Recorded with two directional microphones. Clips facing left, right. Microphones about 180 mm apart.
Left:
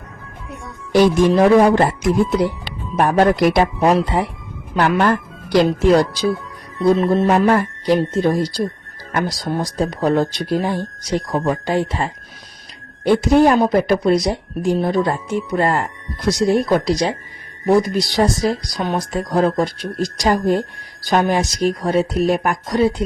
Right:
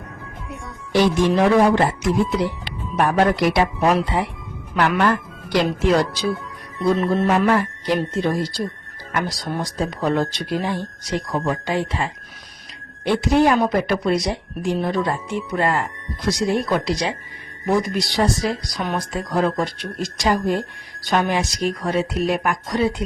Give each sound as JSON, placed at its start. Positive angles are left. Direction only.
{"t": 1.4, "sound": "speech", "side_deg": 45}
{"t": 5.0, "sound": "speech", "side_deg": 40}
{"t": 9.7, "sound": "speech", "side_deg": 40}